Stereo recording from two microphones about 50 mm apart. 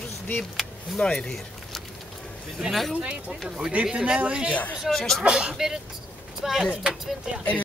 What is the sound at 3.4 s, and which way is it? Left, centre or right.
Speech, centre.